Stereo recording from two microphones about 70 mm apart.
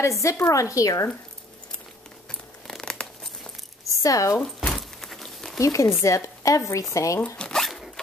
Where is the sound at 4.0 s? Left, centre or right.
Left.